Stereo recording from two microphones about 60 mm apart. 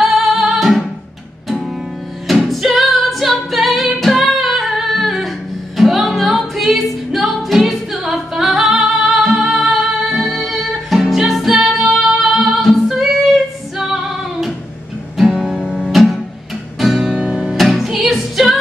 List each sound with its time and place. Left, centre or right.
0.0 s music: centre
2.2 s music: centre
15.1 s music: centre
16.8 s music: centre
17.6 s music: centre